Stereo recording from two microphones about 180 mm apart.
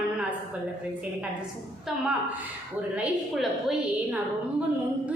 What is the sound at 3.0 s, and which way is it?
A woman's voice, 5° right (ahead or behind).